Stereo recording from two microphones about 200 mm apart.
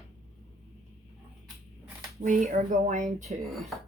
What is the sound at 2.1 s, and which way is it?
Speech, 40° right (ahead or behind).